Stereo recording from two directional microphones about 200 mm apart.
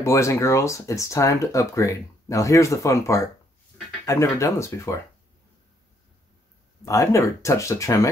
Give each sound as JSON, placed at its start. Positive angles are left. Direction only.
{"t": 0.0, "sound": "speech", "side_deg": 15}
{"t": 6.8, "sound": "speech", "side_deg": 15}